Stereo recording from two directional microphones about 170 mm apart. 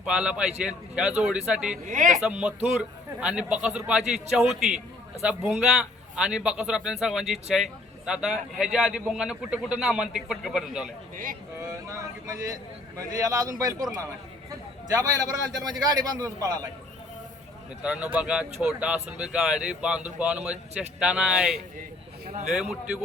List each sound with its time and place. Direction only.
0.0 s a man's voice: 5° right (ahead or behind)
1.9 s speech: 50° right (ahead or behind)
2.2 s a man's voice: 5° right (ahead or behind)
11.9 s a man's voice: 20° right (ahead or behind)
14.9 s a man's voice: 20° right (ahead or behind)
17.8 s speech: 5° right (ahead or behind)